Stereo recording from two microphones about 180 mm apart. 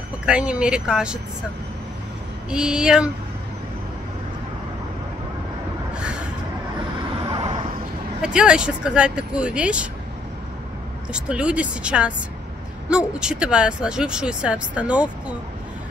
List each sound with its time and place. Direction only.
0.2 s speech: 5° right (ahead or behind)
2.5 s speech: 5° right (ahead or behind)
5.9 s vehicle: 5° right (ahead or behind)
7.2 s vehicle: 30° right (ahead or behind)
8.2 s speech: 5° right (ahead or behind)
11.1 s speech: 5° right (ahead or behind)